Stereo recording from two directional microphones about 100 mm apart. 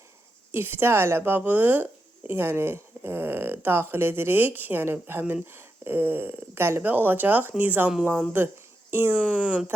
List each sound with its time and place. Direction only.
0.5 s a woman's voice: 20° right (ahead or behind)